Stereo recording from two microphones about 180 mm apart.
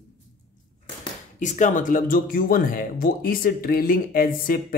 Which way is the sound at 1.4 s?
45° left (ahead or behind).